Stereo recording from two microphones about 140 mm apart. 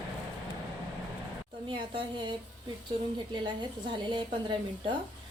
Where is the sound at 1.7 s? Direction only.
35° right (ahead or behind).